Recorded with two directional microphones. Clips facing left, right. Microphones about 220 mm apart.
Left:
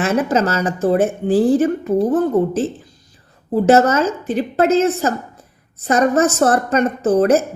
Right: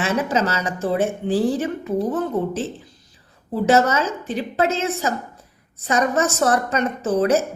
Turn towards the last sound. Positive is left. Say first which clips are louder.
# left 5 dB
turn(degrees=50)  # may be behind; listen again after turning